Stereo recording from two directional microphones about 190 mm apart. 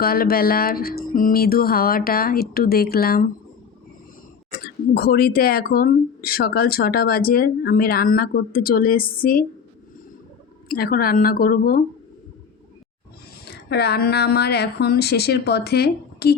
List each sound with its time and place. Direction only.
0.0 s speech: 50° left (ahead or behind)
4.6 s speech: 55° left (ahead or behind)
10.7 s speech: 50° left (ahead or behind)
13.5 s a woman's voice: 60° left (ahead or behind)